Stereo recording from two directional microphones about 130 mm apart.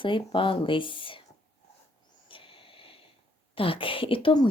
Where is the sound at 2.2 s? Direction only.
40° left (ahead or behind).